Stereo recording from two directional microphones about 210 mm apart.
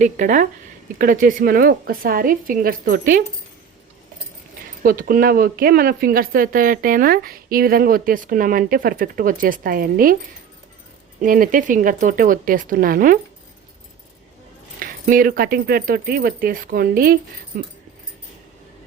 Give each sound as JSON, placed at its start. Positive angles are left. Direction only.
{"t": 0.0, "sound": "a woman's voice", "side_deg": -35}
{"t": 4.8, "sound": "speech", "side_deg": -40}
{"t": 11.2, "sound": "a woman's voice", "side_deg": -40}
{"t": 14.8, "sound": "a woman's voice", "side_deg": -40}